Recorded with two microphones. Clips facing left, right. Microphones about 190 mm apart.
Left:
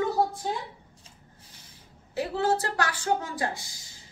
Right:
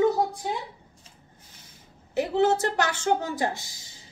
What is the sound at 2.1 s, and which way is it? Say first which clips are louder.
A woman's voice: right 4 dB; 20° right (ahead or behind).